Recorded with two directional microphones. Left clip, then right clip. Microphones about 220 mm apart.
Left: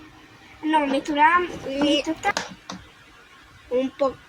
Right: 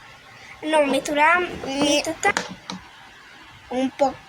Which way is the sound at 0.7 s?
50° right (ahead or behind).